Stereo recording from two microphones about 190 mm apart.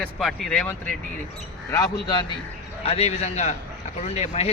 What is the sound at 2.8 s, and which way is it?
A man's voice, 35° left (ahead or behind).